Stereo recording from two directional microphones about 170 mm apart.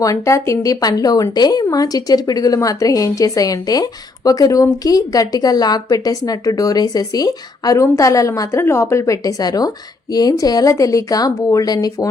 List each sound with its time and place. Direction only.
0.0 s a woman's voice: 20° left (ahead or behind)